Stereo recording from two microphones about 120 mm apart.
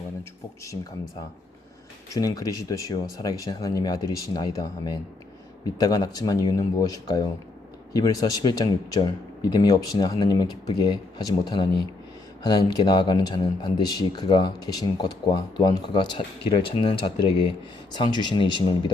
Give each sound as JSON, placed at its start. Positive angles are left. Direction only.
{"t": 2.0, "sound": "speech", "side_deg": 30}